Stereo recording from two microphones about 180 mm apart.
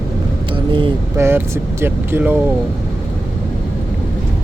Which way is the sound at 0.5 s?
30° right (ahead or behind).